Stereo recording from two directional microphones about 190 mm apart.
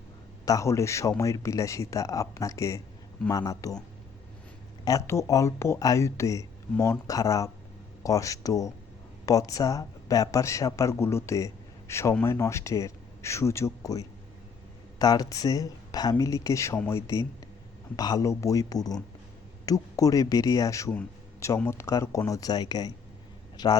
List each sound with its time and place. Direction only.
0.4 s speech: 15° left (ahead or behind)
4.9 s speech: 15° left (ahead or behind)